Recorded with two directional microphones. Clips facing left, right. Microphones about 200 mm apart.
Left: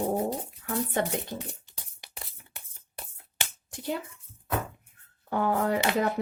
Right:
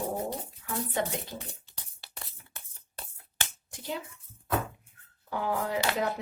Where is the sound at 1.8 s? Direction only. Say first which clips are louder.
Left 2 dB; 15° left (ahead or behind).